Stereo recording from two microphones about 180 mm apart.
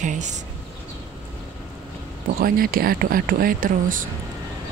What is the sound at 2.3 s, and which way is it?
Speech, 55° right (ahead or behind).